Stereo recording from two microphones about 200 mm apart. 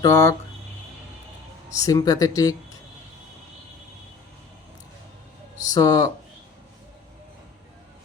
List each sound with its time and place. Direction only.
0.0 s speech: 15° left (ahead or behind)
1.7 s speech: 15° left (ahead or behind)
5.6 s speech: 20° left (ahead or behind)